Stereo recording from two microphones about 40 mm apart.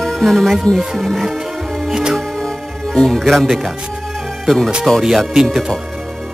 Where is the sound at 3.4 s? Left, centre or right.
Centre.